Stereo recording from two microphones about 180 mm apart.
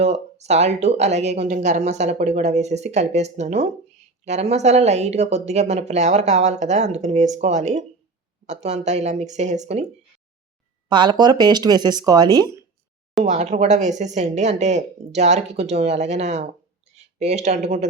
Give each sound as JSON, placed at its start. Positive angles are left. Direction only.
{"t": 0.0, "sound": "speech", "side_deg": -35}
{"t": 10.8, "sound": "speech", "side_deg": -25}
{"t": 13.2, "sound": "speech", "side_deg": -40}